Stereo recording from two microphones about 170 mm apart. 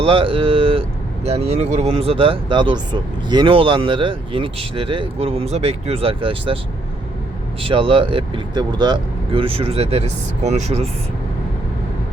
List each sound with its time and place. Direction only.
0.0 s speech: 30° right (ahead or behind)
7.6 s speech: 30° right (ahead or behind)